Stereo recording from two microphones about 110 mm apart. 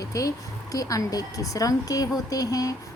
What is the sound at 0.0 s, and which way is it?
A woman's voice, 30° left (ahead or behind).